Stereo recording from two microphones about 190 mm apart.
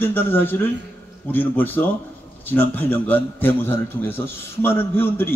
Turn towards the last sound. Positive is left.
turn(degrees=10)  # may be behind; listen again after turning